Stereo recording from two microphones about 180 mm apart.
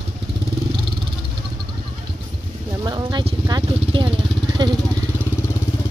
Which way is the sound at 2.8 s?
25° right (ahead or behind).